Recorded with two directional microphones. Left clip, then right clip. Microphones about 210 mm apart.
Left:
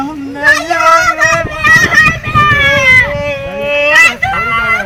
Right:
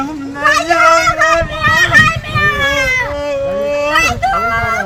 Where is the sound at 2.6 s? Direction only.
55° right (ahead or behind).